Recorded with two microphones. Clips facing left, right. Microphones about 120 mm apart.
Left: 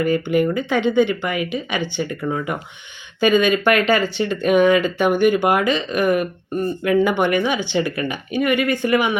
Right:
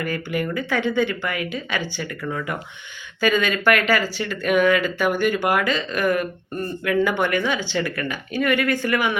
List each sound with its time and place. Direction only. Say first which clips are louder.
0.0 s speech: left 8 dB; 25° left (ahead or behind)